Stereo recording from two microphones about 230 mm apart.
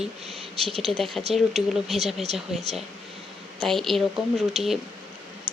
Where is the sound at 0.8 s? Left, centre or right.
Centre.